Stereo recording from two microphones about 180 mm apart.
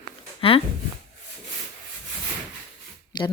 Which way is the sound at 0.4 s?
30° left (ahead or behind).